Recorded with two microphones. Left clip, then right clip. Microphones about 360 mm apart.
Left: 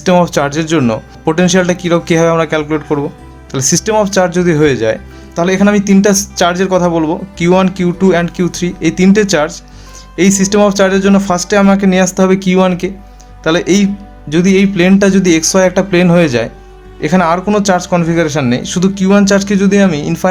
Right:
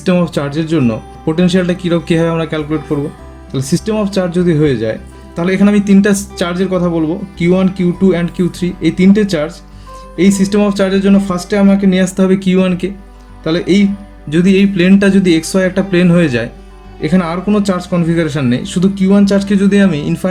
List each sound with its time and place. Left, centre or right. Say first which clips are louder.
0.0 s speech: left 5 dB; centre